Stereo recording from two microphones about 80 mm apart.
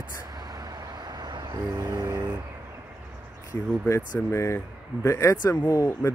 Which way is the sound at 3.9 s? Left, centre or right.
Left.